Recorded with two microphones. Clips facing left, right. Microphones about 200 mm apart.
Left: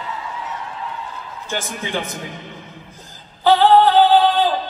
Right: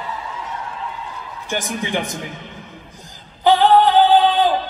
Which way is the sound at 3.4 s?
15° right (ahead or behind).